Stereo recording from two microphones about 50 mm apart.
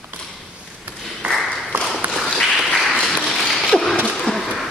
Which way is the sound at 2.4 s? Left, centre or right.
Centre.